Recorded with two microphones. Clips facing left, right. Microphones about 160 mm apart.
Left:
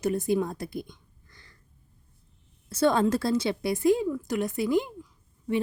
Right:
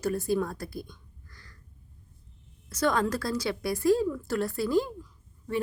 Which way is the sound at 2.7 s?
30° left (ahead or behind).